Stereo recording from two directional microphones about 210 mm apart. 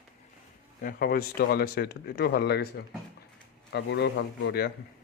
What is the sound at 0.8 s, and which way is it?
Speech, 45° left (ahead or behind).